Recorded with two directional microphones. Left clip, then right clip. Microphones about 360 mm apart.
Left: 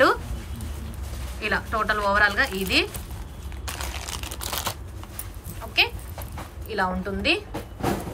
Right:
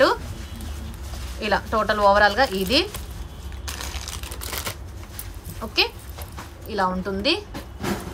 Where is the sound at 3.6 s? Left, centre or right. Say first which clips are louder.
Even; centre.